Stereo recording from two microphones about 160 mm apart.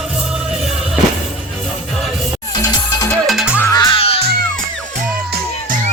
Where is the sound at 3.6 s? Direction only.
25° left (ahead or behind).